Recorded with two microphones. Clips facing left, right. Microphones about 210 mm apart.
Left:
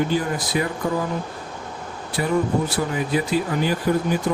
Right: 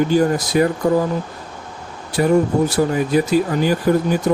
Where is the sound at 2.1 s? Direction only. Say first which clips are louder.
Right 6 dB; 45° right (ahead or behind).